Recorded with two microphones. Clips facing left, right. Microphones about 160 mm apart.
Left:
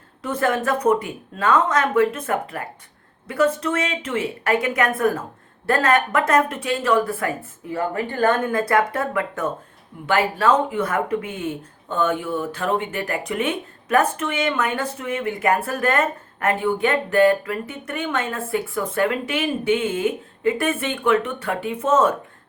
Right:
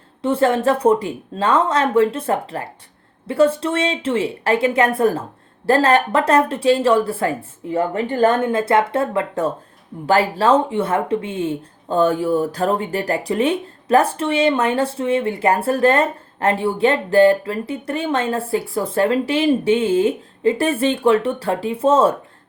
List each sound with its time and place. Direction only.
0.2 s speech: 30° right (ahead or behind)